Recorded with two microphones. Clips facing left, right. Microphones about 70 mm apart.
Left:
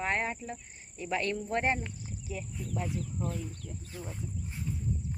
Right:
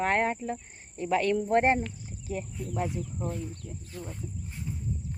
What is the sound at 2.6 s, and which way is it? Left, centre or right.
Speech, centre.